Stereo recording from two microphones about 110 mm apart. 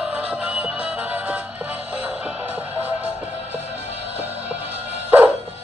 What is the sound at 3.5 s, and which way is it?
Music, 80° left.